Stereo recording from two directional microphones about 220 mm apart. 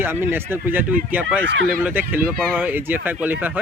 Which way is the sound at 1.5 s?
50° right (ahead or behind).